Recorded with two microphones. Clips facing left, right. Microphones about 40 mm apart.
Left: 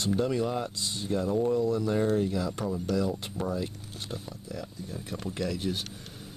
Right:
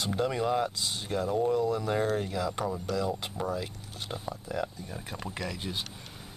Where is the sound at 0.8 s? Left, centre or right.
Right.